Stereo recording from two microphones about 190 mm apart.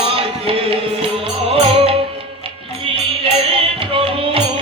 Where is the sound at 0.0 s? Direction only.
30° right (ahead or behind).